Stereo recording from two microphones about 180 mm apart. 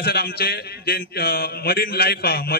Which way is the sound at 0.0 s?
60° left (ahead or behind).